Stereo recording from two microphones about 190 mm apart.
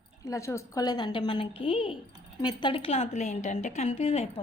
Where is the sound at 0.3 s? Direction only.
15° left (ahead or behind).